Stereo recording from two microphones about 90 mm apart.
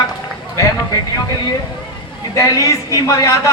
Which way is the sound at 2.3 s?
40° left (ahead or behind).